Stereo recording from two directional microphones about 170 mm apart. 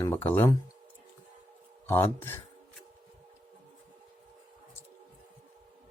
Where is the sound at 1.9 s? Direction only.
15° left (ahead or behind).